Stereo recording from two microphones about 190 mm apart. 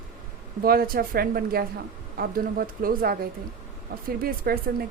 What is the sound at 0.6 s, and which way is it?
A woman's voice, 50° right (ahead or behind).